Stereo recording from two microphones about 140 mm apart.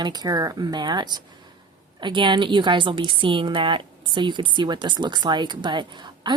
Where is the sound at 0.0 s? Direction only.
30° right (ahead or behind).